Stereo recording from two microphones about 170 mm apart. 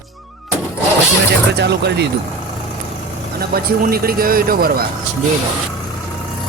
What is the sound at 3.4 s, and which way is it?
A man's voice, 65° right (ahead or behind).